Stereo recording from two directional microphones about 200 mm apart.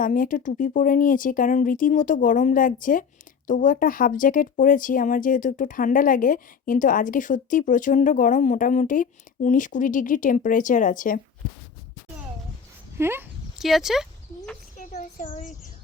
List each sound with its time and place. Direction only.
0.0 s speech: 40° left (ahead or behind)
13.0 s a sound: 10° right (ahead or behind)
13.7 s speech: centre (ahead or behind)
14.8 s child singing: 40° left (ahead or behind)